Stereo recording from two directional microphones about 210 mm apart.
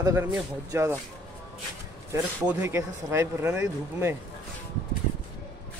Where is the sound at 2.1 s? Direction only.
10° right (ahead or behind).